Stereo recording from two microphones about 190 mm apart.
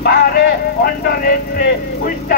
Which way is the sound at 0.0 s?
55° left (ahead or behind).